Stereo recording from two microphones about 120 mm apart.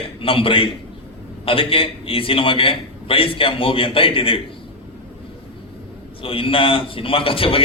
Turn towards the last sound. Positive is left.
turn(degrees=50)  # may be behind; listen again after turning